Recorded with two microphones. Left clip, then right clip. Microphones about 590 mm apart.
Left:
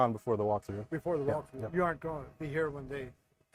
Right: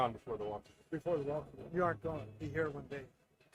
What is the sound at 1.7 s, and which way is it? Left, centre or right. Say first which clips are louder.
Speech: left 3 dB; left.